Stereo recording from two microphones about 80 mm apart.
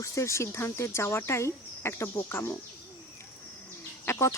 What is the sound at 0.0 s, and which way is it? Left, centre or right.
Speech, left.